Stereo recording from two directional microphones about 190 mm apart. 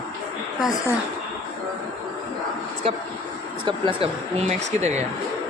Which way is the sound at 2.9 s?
30° right (ahead or behind).